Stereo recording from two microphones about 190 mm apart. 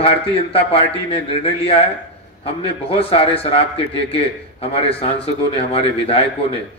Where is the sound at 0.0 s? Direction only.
30° left (ahead or behind).